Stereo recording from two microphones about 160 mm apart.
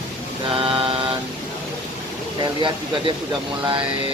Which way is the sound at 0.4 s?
35° right (ahead or behind).